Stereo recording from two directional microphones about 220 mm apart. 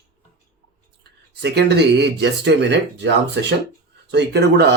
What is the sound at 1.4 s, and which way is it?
Speech, 50° right (ahead or behind).